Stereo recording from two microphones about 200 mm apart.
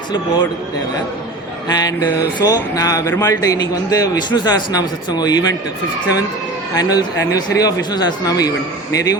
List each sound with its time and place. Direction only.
1.6 s a man's voice: 20° left (ahead or behind)
6.7 s a man's voice: 15° left (ahead or behind)